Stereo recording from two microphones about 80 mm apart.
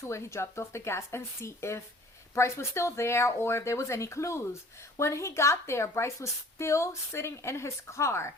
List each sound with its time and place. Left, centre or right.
0.0 s a woman's voice: left